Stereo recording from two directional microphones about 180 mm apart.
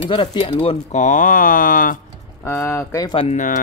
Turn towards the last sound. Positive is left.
turn(degrees=40)  # may be behind; listen again after turning